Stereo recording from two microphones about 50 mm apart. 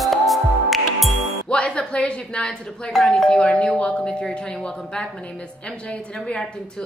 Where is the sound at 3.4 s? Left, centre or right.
Centre.